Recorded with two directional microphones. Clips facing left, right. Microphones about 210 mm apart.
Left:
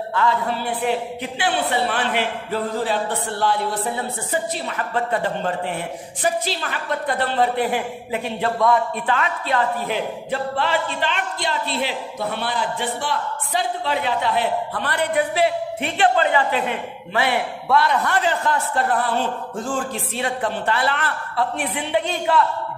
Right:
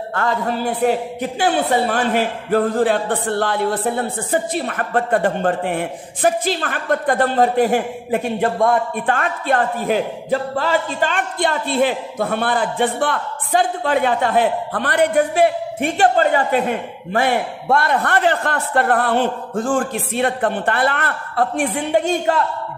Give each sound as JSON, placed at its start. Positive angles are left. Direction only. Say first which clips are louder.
{"t": 0.1, "sound": "a man's voice", "louder": "right 1 dB", "side_deg": -50}